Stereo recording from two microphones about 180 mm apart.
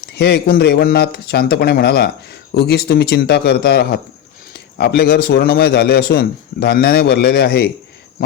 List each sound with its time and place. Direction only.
0.1 s a man's voice: 65° left (ahead or behind)